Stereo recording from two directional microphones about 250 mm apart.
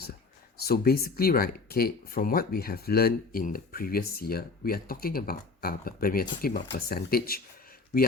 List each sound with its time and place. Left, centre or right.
0.6 s speech: left